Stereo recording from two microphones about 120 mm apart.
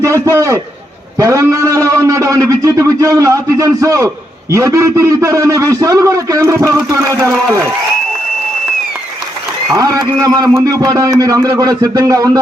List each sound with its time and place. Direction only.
0.0 s a man's voice: 25° right (ahead or behind)
9.7 s a man's voice: 30° right (ahead or behind)